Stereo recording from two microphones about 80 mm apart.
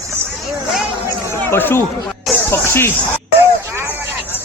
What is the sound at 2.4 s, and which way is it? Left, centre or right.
Music, left.